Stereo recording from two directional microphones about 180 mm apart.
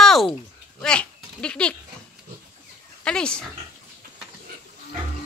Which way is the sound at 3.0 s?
5° left (ahead or behind).